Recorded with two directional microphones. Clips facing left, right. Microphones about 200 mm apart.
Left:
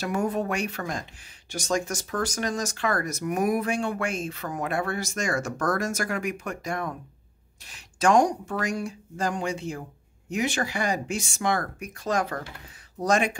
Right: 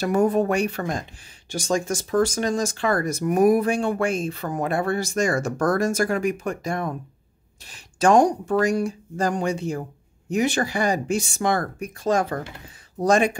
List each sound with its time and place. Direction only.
0.0 s speech: 35° right (ahead or behind)